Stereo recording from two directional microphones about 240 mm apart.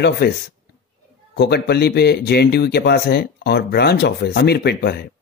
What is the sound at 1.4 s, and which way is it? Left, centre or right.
Speech, left.